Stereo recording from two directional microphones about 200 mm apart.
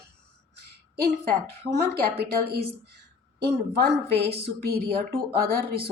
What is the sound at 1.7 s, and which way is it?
A woman's voice, 50° right (ahead or behind).